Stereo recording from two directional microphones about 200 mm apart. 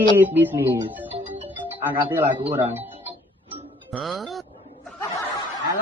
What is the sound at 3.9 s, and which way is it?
Speech, centre (ahead or behind).